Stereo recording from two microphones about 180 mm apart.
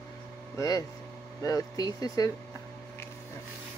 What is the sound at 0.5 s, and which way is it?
Speech, 20° left (ahead or behind).